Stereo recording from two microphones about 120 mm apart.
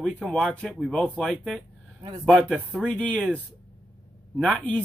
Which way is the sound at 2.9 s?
10° left (ahead or behind).